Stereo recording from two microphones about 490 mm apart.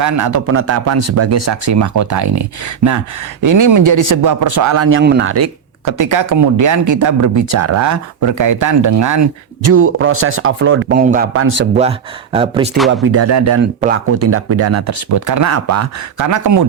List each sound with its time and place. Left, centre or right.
0.0 s speech: right
5.8 s speech: right
11.8 s speech: centre
12.9 s speech: right